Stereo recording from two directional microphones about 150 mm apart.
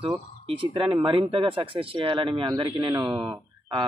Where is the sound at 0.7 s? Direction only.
30° right (ahead or behind).